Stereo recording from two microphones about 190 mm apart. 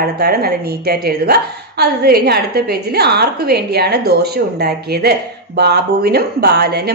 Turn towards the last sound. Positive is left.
turn(degrees=-55)  # may be behind; listen again after turning